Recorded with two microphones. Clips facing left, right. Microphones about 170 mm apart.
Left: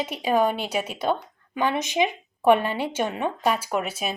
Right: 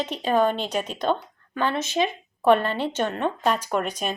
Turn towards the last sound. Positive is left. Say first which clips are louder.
# right 1 dB
turn(degrees=5)  # may be behind; listen again after turning